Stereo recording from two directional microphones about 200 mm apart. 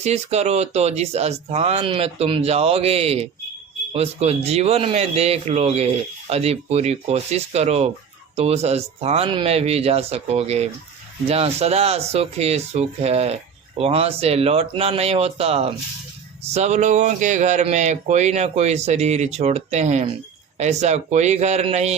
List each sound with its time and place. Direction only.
0.0 s speech: 30° right (ahead or behind)